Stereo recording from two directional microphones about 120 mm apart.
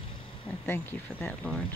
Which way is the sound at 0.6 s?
20° left (ahead or behind).